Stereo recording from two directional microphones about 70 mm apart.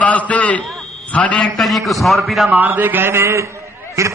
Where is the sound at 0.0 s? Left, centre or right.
Centre.